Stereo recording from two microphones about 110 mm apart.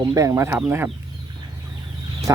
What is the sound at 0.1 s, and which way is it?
Speech, 30° right (ahead or behind).